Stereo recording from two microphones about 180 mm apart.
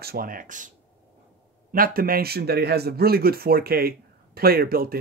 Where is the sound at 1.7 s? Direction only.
55° right (ahead or behind).